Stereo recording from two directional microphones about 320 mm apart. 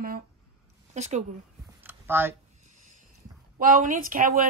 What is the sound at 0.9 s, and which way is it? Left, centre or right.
Speech, right.